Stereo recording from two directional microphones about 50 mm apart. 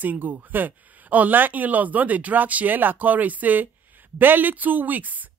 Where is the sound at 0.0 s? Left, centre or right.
Right.